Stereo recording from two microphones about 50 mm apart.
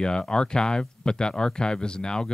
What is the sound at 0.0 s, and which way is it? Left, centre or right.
Speech, centre.